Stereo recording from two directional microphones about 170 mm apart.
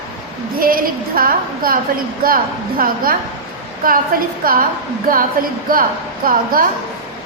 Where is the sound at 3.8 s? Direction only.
55° right (ahead or behind).